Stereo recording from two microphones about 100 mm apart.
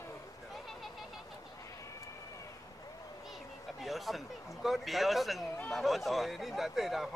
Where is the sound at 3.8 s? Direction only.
Centre (ahead or behind).